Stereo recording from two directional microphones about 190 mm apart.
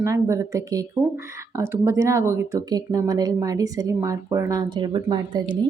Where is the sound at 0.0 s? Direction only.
15° right (ahead or behind).